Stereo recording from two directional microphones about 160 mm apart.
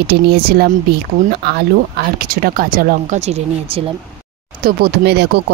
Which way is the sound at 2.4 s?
65° right (ahead or behind).